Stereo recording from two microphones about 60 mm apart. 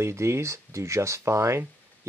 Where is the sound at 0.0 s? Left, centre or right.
Right.